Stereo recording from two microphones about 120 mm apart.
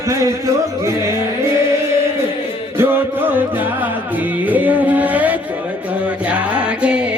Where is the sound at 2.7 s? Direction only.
15° right (ahead or behind).